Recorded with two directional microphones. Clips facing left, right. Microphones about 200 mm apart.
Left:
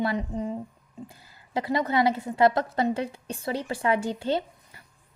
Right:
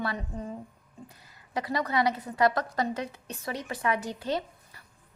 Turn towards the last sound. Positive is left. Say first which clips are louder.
# left 3 dB
turn(degrees=25)  # may be behind; listen again after turning